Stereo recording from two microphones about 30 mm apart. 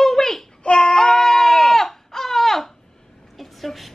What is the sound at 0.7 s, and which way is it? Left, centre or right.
Baby cry, left.